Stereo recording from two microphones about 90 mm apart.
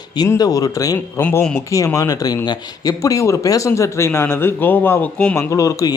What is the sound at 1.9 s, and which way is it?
Speech, 40° left (ahead or behind).